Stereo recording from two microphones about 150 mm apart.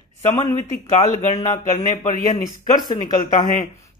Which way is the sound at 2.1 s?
65° left (ahead or behind).